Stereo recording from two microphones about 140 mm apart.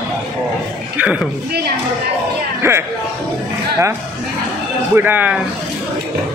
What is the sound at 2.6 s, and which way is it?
Music, 20° right (ahead or behind).